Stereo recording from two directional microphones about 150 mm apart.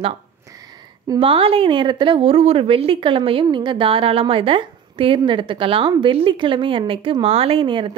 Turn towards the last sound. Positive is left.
turn(degrees=-35)  # may be behind; listen again after turning